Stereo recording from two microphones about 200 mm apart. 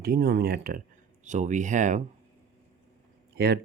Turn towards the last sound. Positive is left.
turn(degrees=-50)  # may be behind; listen again after turning